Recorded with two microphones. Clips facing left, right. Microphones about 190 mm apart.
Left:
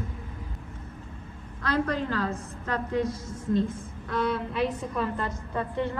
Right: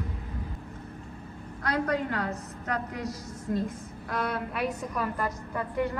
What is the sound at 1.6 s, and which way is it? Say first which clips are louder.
A woman's voice: left 1 dB; 30° left (ahead or behind).